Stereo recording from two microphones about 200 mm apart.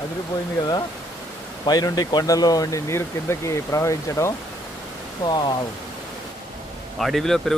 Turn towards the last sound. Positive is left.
turn(degrees=0)  # may be behind; listen again after turning